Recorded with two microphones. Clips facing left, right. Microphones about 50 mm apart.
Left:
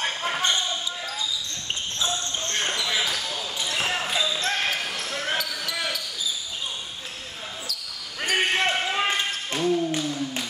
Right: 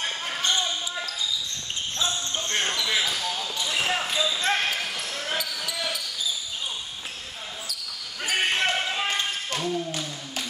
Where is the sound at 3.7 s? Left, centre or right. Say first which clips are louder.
Right 1 dB; centre.